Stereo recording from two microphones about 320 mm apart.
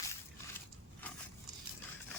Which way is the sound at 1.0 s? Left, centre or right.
Centre.